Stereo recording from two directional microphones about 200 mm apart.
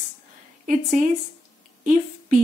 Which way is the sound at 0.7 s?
40° right (ahead or behind).